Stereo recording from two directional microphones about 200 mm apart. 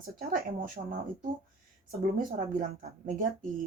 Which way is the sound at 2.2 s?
40° right (ahead or behind).